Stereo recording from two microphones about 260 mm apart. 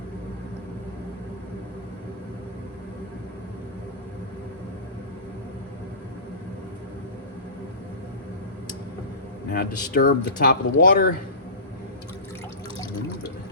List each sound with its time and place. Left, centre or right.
9.5 s speech: left